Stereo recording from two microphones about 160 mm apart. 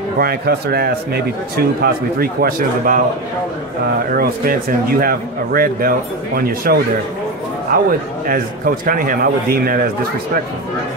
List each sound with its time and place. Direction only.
0.2 s a man's voice: 75° right (ahead or behind)
4.1 s speech: 65° right (ahead or behind)